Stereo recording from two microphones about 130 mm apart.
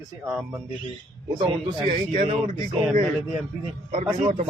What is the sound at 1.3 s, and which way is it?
A man's voice, 45° right (ahead or behind).